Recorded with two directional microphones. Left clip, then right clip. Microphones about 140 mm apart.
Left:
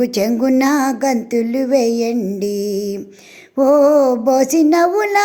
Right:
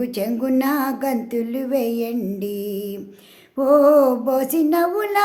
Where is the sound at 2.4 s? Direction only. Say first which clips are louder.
Left 7 dB; 40° left (ahead or behind).